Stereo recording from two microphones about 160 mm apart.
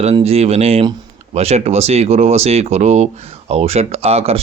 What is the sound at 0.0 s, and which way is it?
Speech, 40° right (ahead or behind).